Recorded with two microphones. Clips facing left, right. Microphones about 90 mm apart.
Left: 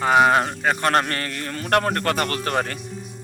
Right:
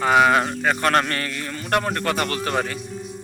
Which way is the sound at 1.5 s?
65° left (ahead or behind).